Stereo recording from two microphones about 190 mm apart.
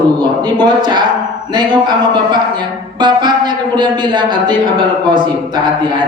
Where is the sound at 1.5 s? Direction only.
25° right (ahead or behind).